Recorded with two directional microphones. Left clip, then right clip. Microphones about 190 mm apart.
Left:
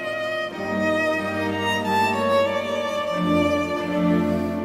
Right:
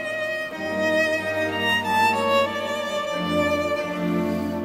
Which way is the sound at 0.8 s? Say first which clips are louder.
Right 1 dB; 30° left (ahead or behind).